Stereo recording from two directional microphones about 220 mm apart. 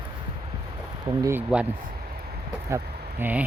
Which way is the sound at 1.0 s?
15° right (ahead or behind).